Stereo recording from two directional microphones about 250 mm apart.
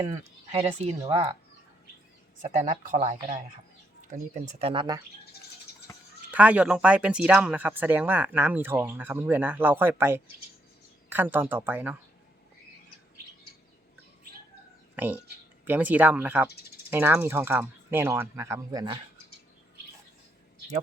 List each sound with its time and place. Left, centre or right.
0.1 s speech: right
2.4 s speech: right
5.9 s a sound: centre
6.3 s speech: centre
14.9 s speech: centre